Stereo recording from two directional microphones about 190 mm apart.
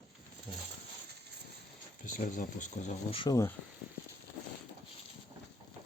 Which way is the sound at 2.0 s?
45° left (ahead or behind).